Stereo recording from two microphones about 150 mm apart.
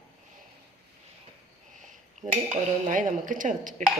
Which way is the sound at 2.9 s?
60° right (ahead or behind).